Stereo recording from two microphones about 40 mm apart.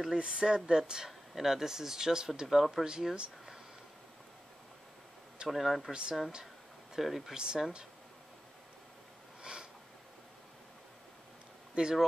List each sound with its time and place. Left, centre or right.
0.1 s speech: centre
2.4 s speech: centre
2.8 s speech: centre
5.5 s speech: centre
7.0 s speech: centre
7.3 s speech: centre
9.4 s sniff: right
11.7 s speech: right